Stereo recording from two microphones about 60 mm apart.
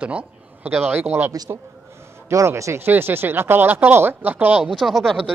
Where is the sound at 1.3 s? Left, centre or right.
Right.